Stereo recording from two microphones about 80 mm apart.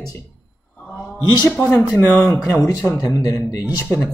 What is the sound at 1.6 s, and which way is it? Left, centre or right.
Speech, left.